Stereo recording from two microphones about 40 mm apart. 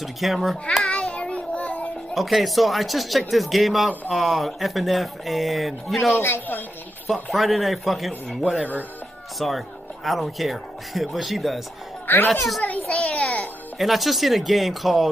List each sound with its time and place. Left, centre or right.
0.0 s speech: centre
0.8 s child singing: left
2.1 s speech: centre
6.1 s a man's voice: left
7.3 s speech: centre
12.6 s children playing: left
12.9 s a sound: left
13.7 s speech: centre